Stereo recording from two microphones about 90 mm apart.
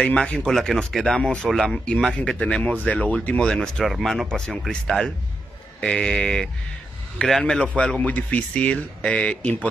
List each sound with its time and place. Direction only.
0.0 s speech: 10° left (ahead or behind)